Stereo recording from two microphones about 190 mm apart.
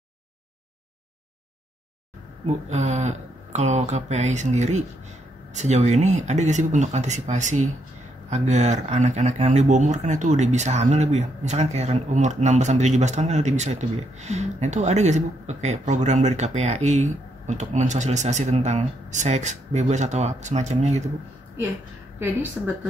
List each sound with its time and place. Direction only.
2.4 s speech: 35° right (ahead or behind)
22.6 s speech: 10° right (ahead or behind)